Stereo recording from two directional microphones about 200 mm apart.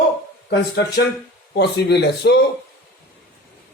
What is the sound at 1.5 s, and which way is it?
Speech, 55° left (ahead or behind).